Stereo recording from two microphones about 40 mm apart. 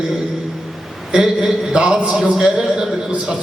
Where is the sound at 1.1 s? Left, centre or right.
Centre.